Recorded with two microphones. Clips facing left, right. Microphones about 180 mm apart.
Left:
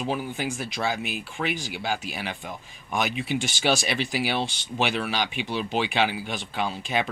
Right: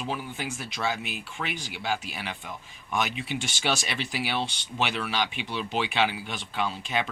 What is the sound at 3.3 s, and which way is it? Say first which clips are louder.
Speech: left 5 dB; 5° left (ahead or behind).